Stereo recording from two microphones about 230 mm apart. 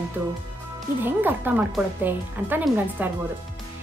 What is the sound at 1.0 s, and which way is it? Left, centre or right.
Speech, centre.